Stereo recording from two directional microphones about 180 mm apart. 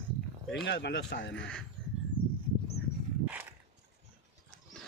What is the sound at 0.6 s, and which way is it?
Speech, 75° left (ahead or behind).